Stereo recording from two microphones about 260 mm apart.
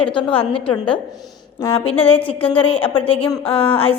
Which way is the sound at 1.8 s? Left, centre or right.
Left.